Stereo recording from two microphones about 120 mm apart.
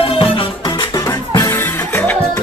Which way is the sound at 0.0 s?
50° left (ahead or behind).